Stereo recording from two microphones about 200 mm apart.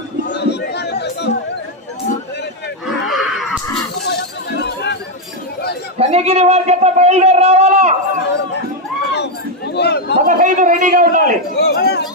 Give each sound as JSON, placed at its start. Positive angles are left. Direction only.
{"t": 0.3, "sound": "chatter", "side_deg": 60}
{"t": 3.1, "sound": "wheeze", "side_deg": 0}
{"t": 4.1, "sound": "chink", "side_deg": 55}
{"t": 6.0, "sound": "a man's voice", "side_deg": -30}
{"t": 9.0, "sound": "a sound", "side_deg": 60}
{"t": 10.2, "sound": "a man's voice", "side_deg": -40}
{"t": 11.6, "sound": "a sound", "side_deg": 55}